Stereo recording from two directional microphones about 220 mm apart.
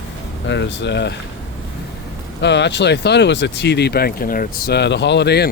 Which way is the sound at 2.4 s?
50° left (ahead or behind).